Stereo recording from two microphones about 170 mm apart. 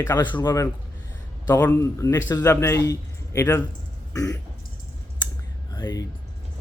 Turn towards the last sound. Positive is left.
turn(degrees=25)  # may be behind; listen again after turning